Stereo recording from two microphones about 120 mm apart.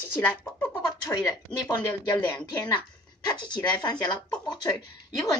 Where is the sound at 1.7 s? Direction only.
35° left (ahead or behind).